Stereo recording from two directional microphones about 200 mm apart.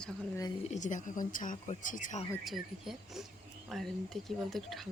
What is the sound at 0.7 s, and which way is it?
Speech, 40° left (ahead or behind).